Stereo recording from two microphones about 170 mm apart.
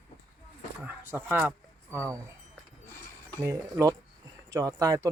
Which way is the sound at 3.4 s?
20° right (ahead or behind).